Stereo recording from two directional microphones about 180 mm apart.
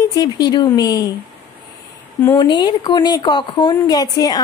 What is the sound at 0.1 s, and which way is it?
Speech, 25° left (ahead or behind).